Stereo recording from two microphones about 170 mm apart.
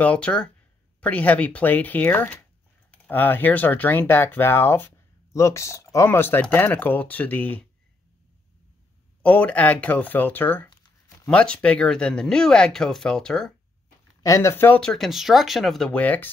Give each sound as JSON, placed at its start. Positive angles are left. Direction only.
{"t": 0.0, "sound": "speech", "side_deg": 5}
{"t": 9.2, "sound": "speech", "side_deg": 10}
{"t": 14.2, "sound": "speech", "side_deg": 15}